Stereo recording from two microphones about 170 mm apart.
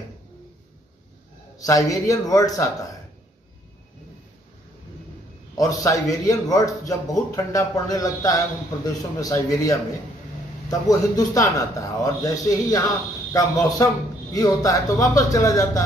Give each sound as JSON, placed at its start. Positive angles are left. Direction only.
{"t": 1.6, "sound": "a man's voice", "side_deg": 20}
{"t": 5.6, "sound": "a man's voice", "side_deg": 20}